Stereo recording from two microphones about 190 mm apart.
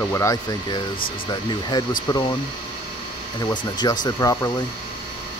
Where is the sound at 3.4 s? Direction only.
20° left (ahead or behind).